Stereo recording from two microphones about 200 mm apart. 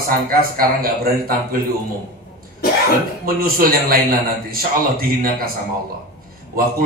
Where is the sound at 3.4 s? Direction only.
45° right (ahead or behind).